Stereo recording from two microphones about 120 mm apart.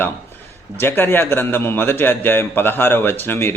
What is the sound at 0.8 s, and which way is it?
A man's voice, 15° left (ahead or behind).